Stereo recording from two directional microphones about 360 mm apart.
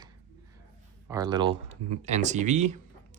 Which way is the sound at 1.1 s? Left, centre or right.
Centre.